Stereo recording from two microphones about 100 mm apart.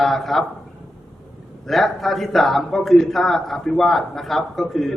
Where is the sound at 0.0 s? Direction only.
Centre (ahead or behind).